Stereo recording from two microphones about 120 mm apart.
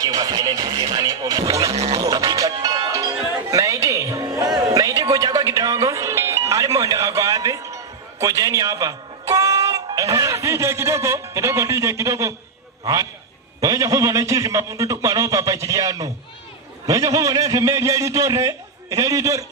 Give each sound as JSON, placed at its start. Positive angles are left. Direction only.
{"t": 0.0, "sound": "music", "side_deg": -30}
{"t": 12.8, "sound": "a man's voice", "side_deg": -30}